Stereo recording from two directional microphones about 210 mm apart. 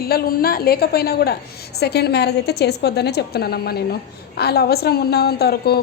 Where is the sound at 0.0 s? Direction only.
45° left (ahead or behind).